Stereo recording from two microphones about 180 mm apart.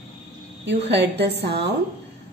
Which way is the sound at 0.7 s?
70° right (ahead or behind).